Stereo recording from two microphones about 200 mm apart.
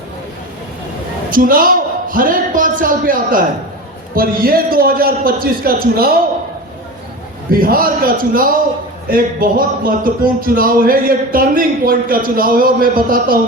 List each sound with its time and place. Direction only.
1.3 s speech: 45° right (ahead or behind)
7.5 s speech: 45° right (ahead or behind)